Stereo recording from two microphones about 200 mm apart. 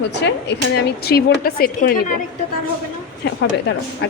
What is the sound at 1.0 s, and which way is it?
Speech, 50° left (ahead or behind).